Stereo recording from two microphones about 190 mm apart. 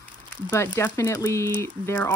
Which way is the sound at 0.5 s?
10° left (ahead or behind).